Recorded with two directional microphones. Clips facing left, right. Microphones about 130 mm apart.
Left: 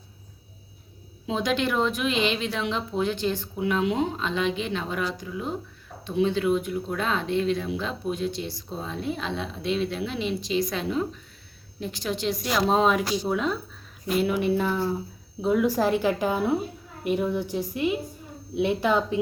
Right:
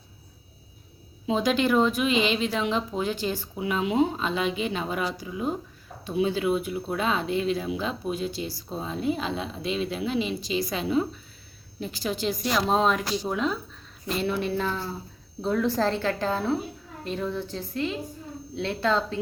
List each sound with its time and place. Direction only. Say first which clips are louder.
1.3 s a woman's voice: right 3 dB; centre (ahead or behind); by 19.2 s 15° left (ahead or behind)